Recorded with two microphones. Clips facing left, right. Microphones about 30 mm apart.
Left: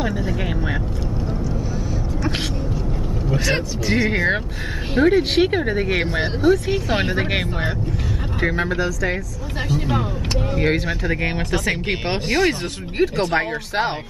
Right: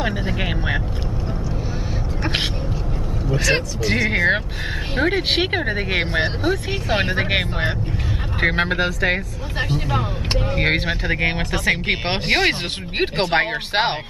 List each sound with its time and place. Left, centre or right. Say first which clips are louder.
0.0 s speech: even; right
3.3 s speech: right 2 dB; centre
4.1 s speech: right 2 dB; centre
4.9 s speech: left 4 dB; right
8.4 s speech: right 2 dB; right
9.6 s speech: even; right
11.1 s speech: right 1 dB; right
12.1 s speech: even; right